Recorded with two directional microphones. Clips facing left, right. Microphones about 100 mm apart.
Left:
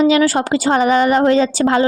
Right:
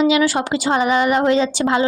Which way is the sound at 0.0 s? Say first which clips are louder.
Left 3 dB; 40° left (ahead or behind).